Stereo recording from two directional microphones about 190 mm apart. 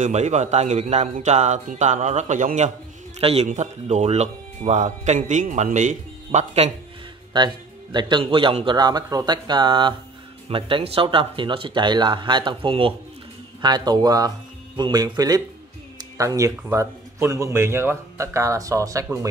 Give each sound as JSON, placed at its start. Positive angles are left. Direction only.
{"t": 0.0, "sound": "a man's voice", "side_deg": -40}
{"t": 7.3, "sound": "speech", "side_deg": -25}